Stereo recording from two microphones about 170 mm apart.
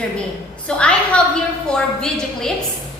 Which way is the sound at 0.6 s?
5° left (ahead or behind).